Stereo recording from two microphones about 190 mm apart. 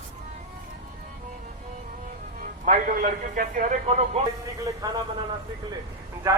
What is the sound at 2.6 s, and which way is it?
A man's voice, 45° right (ahead or behind).